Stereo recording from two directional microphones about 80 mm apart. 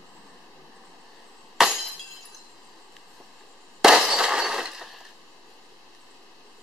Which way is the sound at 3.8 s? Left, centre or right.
Centre.